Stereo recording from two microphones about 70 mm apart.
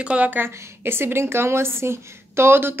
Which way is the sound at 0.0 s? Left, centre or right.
Centre.